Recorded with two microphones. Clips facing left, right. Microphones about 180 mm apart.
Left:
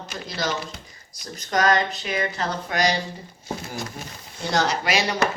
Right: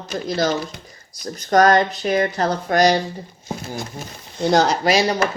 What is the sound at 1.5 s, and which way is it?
A woman's voice, 45° right (ahead or behind).